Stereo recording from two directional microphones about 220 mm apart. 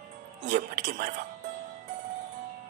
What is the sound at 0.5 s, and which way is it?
Speech, 35° right (ahead or behind).